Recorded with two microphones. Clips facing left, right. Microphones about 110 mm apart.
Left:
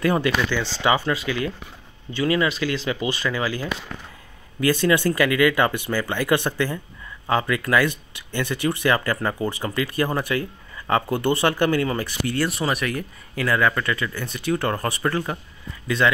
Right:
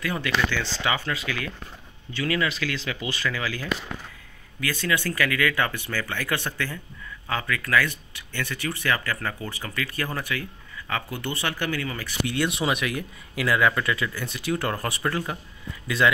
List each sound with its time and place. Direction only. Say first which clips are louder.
0.0 s speech: left 5 dB; 40° left (ahead or behind)
5.0 s speech: left 6 dB; 20° left (ahead or behind); by 12.1 s 40° left (ahead or behind)
12.3 s speech: left 1 dB; centre (ahead or behind)